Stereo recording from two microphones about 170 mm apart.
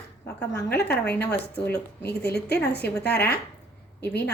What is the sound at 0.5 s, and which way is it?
A woman's voice, 75° left (ahead or behind).